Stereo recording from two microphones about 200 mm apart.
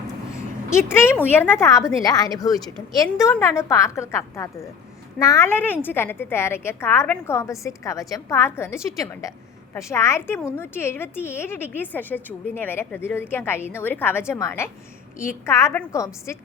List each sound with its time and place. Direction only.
0.9 s a woman's voice: 10° left (ahead or behind)